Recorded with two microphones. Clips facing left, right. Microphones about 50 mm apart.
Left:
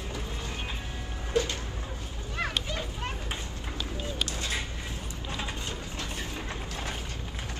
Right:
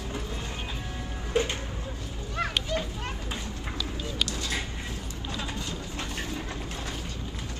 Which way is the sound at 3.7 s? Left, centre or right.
Left.